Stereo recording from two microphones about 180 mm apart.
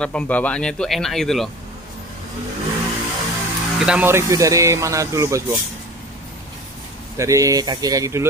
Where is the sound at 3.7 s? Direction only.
5° right (ahead or behind).